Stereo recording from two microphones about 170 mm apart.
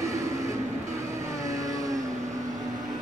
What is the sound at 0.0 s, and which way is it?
Train, 20° right (ahead or behind).